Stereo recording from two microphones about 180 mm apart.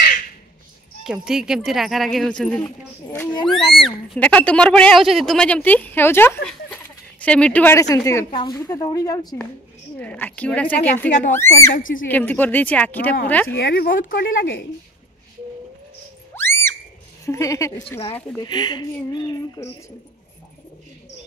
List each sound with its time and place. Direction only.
1.0 s a woman's voice: 5° right (ahead or behind); by 9.4 s 20° left (ahead or behind)
9.9 s a woman's voice: 10° left (ahead or behind)
11.1 s speech: 45° left (ahead or behind)
11.3 s a woman's voice: 15° left (ahead or behind)
11.7 s speech: 50° left (ahead or behind)
12.1 s a woman's voice: 10° left (ahead or behind)
13.7 s a woman's voice: 65° left (ahead or behind)
16.3 s neigh: 10° left (ahead or behind)
17.2 s speech: 15° left (ahead or behind)